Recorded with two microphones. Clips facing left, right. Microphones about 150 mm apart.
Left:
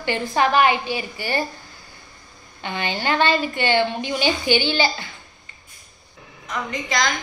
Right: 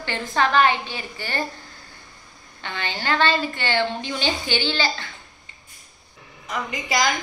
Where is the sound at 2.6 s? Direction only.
15° left (ahead or behind).